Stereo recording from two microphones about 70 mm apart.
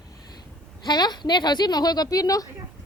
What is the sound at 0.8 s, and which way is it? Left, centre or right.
Speech, left.